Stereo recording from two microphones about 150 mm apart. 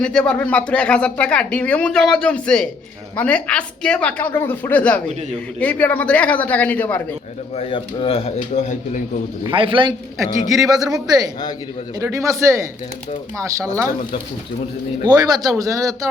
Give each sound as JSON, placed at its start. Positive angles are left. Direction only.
{"t": 0.0, "sound": "speech", "side_deg": 5}
{"t": 7.5, "sound": "speech", "side_deg": 40}
{"t": 9.4, "sound": "a man's voice", "side_deg": -35}
{"t": 15.0, "sound": "speech", "side_deg": -25}